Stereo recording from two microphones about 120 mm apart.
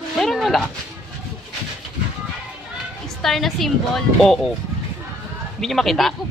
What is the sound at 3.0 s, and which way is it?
Speech, centre (ahead or behind).